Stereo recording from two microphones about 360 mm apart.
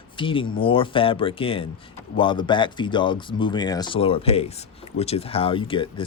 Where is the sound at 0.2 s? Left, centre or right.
Centre.